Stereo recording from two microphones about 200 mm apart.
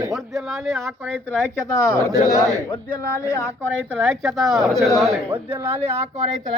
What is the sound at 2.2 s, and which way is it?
Speech, 20° left (ahead or behind).